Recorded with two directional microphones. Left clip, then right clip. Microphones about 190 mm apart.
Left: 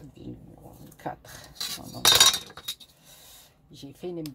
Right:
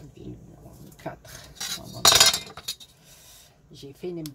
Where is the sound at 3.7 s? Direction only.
35° left (ahead or behind).